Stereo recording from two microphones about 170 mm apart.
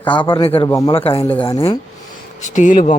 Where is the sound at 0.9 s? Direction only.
35° left (ahead or behind).